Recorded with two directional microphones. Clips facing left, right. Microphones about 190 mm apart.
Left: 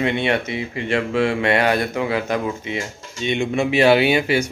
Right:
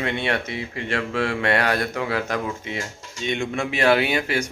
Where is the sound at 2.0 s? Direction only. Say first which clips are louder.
Left 4 dB; 20° left (ahead or behind).